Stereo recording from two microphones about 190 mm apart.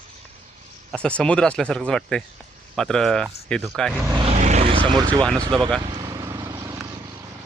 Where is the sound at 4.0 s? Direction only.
15° right (ahead or behind).